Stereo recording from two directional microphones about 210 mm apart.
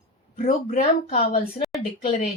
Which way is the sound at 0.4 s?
40° left (ahead or behind).